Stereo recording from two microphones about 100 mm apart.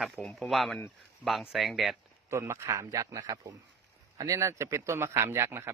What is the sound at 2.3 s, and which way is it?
A man's voice, 30° right (ahead or behind).